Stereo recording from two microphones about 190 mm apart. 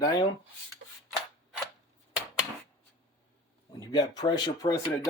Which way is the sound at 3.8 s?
20° left (ahead or behind).